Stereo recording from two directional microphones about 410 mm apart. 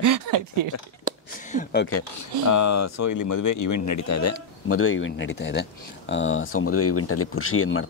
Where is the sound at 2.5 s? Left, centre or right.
Left.